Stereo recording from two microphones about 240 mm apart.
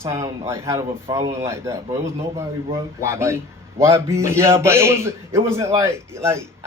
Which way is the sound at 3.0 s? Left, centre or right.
Centre.